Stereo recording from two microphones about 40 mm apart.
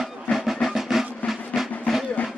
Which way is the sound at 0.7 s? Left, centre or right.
Centre.